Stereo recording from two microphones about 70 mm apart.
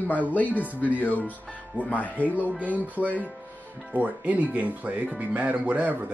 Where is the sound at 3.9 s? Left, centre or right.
Right.